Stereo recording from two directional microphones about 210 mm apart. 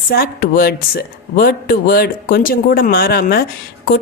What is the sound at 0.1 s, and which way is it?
Speech, 45° left (ahead or behind).